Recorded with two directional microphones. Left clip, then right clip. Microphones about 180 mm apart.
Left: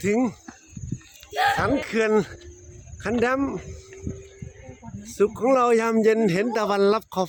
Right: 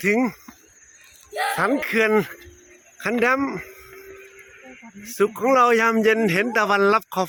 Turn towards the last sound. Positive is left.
turn(degrees=5)  # may be behind; listen again after turning